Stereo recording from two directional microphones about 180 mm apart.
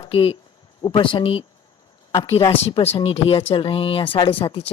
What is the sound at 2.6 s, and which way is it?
Speech, 35° left (ahead or behind).